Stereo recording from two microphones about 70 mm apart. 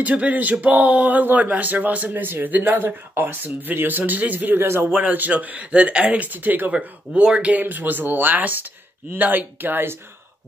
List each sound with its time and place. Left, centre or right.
0.0 s speech: right